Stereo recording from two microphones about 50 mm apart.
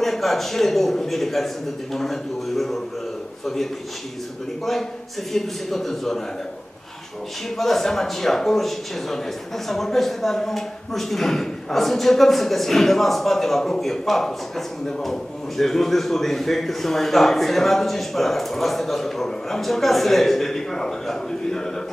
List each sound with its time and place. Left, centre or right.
0.0 s a man's voice: centre
5.3 s a man's voice: centre
7.5 s a man's voice: centre